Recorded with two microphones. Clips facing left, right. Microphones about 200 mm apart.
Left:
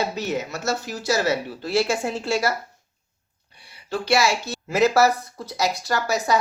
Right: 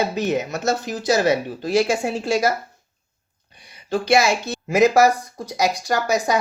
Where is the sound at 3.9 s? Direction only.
15° right (ahead or behind).